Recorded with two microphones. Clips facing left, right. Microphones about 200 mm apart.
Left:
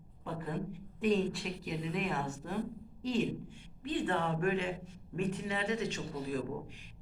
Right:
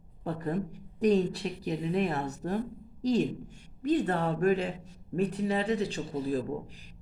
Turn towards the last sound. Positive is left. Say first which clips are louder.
# right 5 dB
turn(degrees=-35)  # may be behind; listen again after turning